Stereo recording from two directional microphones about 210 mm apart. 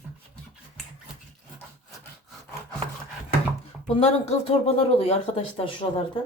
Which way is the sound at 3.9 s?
30° left (ahead or behind).